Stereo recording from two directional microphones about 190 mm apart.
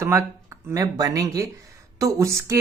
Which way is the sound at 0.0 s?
15° right (ahead or behind).